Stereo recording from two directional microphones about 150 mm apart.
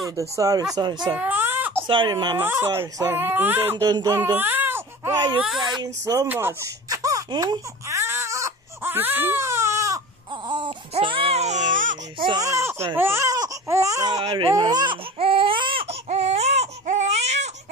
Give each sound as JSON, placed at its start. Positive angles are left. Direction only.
{"t": 0.4, "sound": "speech", "side_deg": -25}
{"t": 1.1, "sound": "speech", "side_deg": -10}
{"t": 1.9, "sound": "speech", "side_deg": -30}
{"t": 2.3, "sound": "speech", "side_deg": -15}
{"t": 3.7, "sound": "speech", "side_deg": -30}
{"t": 4.1, "sound": "speech", "side_deg": -15}
{"t": 5.8, "sound": "a sound", "side_deg": -20}
{"t": 10.5, "sound": "baby cry", "side_deg": -35}
{"t": 12.2, "sound": "speech", "side_deg": -30}
{"t": 12.4, "sound": "speech", "side_deg": -20}
{"t": 14.5, "sound": "baby cry", "side_deg": -25}